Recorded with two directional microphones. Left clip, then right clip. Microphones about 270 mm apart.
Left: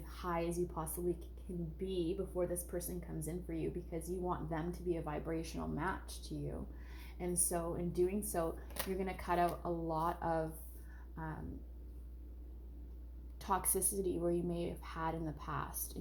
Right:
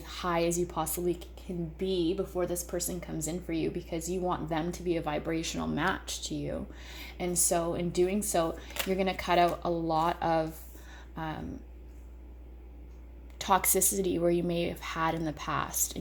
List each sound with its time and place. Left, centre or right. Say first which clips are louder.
0.0 s a woman's voice: right 10 dB; right
11.1 s a sound: right 10 dB; right
13.4 s a woman's voice: right 10 dB; right